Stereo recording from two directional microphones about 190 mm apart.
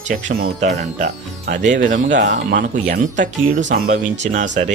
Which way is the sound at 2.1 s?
65° right (ahead or behind).